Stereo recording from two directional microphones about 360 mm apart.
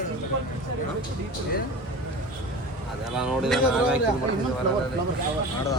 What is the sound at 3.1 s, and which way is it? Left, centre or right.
Speech, centre.